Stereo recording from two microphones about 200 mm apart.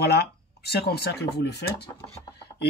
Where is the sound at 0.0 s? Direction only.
55° left (ahead or behind).